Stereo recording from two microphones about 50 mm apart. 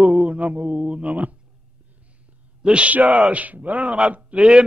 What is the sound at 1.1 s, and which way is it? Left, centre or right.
Speech, right.